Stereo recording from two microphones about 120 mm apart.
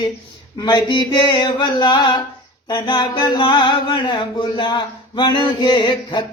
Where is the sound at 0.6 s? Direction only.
40° left (ahead or behind).